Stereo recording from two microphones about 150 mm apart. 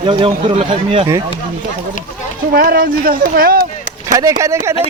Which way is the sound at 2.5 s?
80° right.